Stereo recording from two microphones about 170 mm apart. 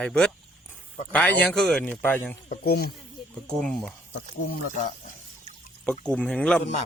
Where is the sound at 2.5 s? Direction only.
65° left (ahead or behind).